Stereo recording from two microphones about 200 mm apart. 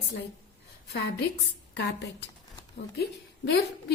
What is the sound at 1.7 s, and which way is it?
Speech, 60° left (ahead or behind).